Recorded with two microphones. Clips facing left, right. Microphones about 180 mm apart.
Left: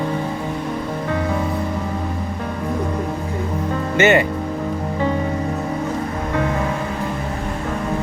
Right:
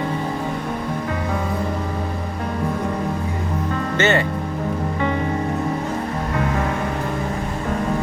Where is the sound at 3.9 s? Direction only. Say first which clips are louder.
Left 4 dB; 10° left (ahead or behind).